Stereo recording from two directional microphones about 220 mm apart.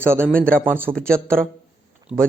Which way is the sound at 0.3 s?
40° right (ahead or behind).